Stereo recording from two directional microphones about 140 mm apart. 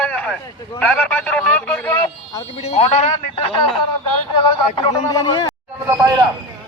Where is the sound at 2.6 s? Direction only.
50° left (ahead or behind).